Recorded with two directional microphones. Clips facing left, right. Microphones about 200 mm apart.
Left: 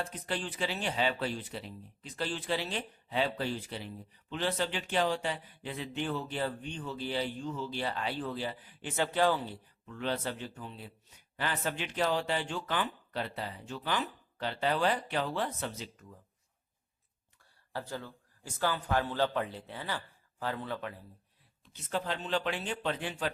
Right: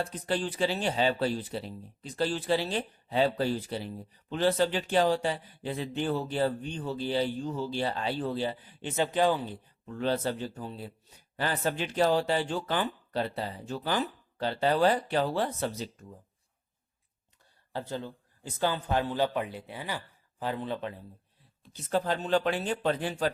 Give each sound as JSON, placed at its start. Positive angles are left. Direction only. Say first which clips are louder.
{"t": 0.0, "sound": "speech", "louder": "right 6 dB", "side_deg": -35}
{"t": 9.8, "sound": "speech", "louder": "right 5 dB", "side_deg": -35}
{"t": 17.7, "sound": "speech", "louder": "right 4 dB", "side_deg": -20}
{"t": 21.6, "sound": "speech", "louder": "right 6 dB", "side_deg": -35}